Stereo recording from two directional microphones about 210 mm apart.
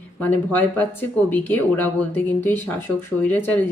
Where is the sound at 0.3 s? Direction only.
10° left (ahead or behind).